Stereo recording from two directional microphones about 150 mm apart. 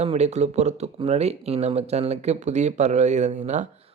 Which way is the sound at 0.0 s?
45° right (ahead or behind).